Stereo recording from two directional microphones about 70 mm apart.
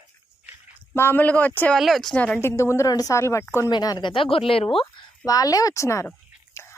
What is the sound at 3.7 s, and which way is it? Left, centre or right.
Speech, left.